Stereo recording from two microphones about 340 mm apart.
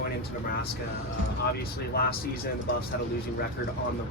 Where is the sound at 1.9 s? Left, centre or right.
Left.